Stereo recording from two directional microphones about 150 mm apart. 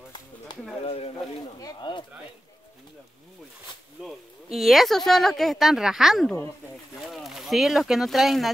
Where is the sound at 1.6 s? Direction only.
25° left (ahead or behind).